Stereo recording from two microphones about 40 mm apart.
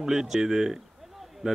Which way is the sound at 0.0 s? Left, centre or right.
Centre.